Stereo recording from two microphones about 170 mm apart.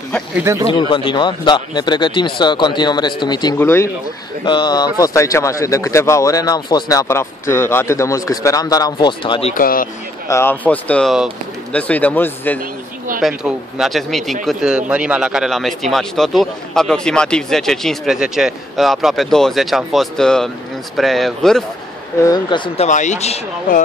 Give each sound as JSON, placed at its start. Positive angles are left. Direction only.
{"t": 0.4, "sound": "speech", "side_deg": -15}
{"t": 0.7, "sound": "speech", "side_deg": 30}
{"t": 3.5, "sound": "speech", "side_deg": 15}
{"t": 4.5, "sound": "speech", "side_deg": 25}
{"t": 9.5, "sound": "speech", "side_deg": 55}
{"t": 10.2, "sound": "speech", "side_deg": 15}
{"t": 13.2, "sound": "a man's voice", "side_deg": -5}
{"t": 22.2, "sound": "speech", "side_deg": 25}
{"t": 22.8, "sound": "speech", "side_deg": 45}